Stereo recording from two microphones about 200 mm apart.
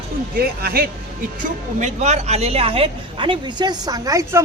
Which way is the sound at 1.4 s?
35° right (ahead or behind).